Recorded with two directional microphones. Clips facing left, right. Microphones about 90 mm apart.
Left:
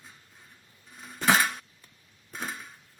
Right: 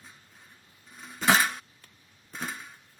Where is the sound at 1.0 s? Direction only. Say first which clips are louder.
Even; centre (ahead or behind).